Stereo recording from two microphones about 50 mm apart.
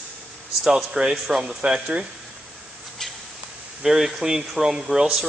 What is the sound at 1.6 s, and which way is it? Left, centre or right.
Speech, right.